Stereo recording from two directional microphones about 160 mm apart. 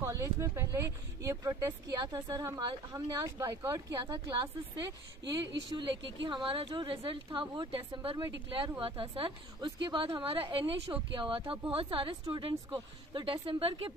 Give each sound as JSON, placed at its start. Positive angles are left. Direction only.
{"t": 0.0, "sound": "a woman's voice", "side_deg": -20}